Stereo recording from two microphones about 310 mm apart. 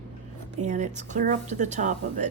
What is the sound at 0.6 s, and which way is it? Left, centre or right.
Speech, right.